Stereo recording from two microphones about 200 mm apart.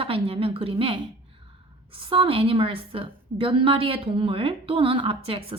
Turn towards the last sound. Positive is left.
turn(degrees=-30)  # may be behind; listen again after turning